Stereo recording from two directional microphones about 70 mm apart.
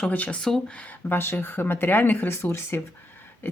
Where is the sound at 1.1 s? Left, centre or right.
Left.